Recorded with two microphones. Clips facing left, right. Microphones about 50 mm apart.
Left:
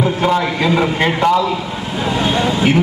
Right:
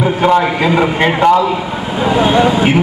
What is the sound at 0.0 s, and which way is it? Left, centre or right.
A man's voice, right.